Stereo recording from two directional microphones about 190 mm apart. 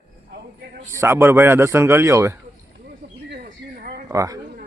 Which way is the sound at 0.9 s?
15° right (ahead or behind).